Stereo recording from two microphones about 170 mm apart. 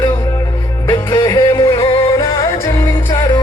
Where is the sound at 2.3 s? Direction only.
15° left (ahead or behind).